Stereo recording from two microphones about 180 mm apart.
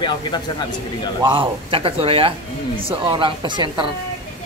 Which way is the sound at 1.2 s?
30° right (ahead or behind).